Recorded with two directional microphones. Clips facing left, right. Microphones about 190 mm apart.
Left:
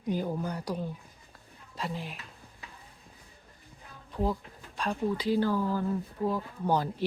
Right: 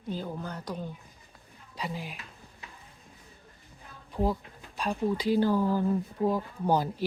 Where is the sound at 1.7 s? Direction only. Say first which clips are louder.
Even; centre (ahead or behind).